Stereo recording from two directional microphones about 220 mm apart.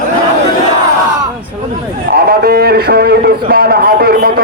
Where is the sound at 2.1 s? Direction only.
45° right (ahead or behind).